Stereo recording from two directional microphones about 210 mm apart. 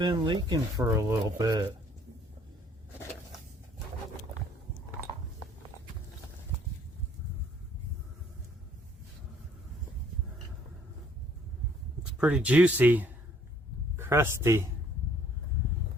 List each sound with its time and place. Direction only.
0.0 s speech: 20° right (ahead or behind)
12.1 s speech: 5° right (ahead or behind)